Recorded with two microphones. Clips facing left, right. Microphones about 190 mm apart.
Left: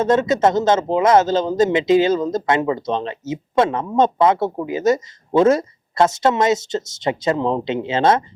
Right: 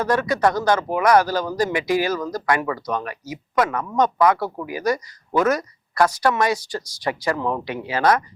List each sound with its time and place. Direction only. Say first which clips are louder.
0.0 s speech: left 4 dB; 25° left (ahead or behind)